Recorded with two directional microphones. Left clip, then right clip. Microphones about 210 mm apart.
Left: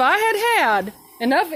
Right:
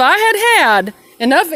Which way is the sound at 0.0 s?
30° right (ahead or behind).